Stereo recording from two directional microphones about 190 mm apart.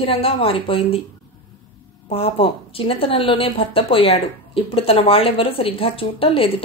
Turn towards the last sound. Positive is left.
turn(degrees=30)  # may be behind; listen again after turning